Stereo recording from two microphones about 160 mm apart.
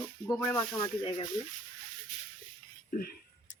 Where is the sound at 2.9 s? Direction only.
65° left (ahead or behind).